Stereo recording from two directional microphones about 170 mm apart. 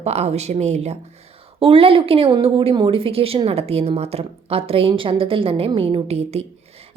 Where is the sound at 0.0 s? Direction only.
40° right (ahead or behind).